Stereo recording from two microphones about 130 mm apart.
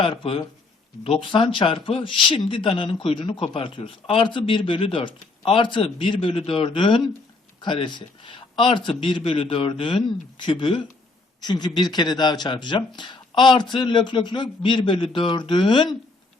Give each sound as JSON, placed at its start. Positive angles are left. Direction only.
{"t": 0.0, "sound": "speech", "side_deg": 45}